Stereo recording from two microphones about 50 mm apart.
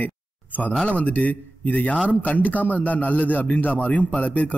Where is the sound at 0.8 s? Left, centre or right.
Left.